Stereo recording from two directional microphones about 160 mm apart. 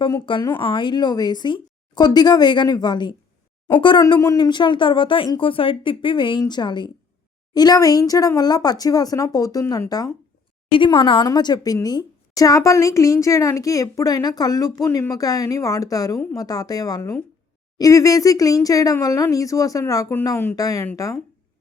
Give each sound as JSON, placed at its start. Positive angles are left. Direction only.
{"t": 0.0, "sound": "a woman's voice", "side_deg": 30}